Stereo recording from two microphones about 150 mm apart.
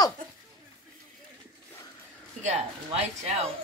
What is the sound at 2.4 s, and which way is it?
Speech, 45° right (ahead or behind).